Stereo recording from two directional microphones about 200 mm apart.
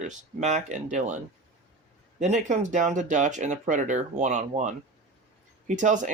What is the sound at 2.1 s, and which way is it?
Speech, 35° right (ahead or behind).